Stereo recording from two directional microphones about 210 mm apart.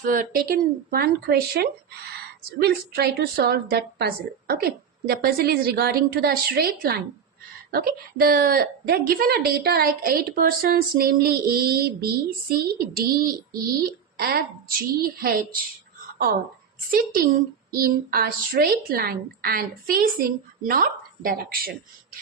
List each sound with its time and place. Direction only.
0.0 s a woman's voice: 40° right (ahead or behind)
17.7 s a woman's voice: 45° right (ahead or behind)